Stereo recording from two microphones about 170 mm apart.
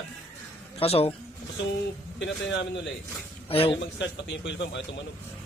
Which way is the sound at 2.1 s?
90° left.